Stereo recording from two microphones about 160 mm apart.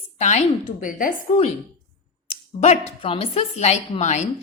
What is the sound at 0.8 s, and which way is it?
Speech, 55° left (ahead or behind).